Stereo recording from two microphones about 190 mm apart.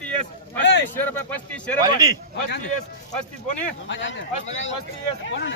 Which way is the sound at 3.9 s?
70° left (ahead or behind).